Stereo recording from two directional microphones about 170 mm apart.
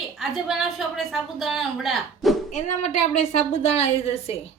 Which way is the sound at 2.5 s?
40° left (ahead or behind).